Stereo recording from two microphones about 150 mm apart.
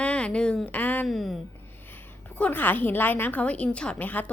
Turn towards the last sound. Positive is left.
turn(degrees=10)  # may be behind; listen again after turning